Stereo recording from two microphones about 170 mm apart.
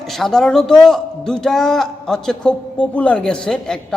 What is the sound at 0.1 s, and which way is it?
Speech, centre (ahead or behind).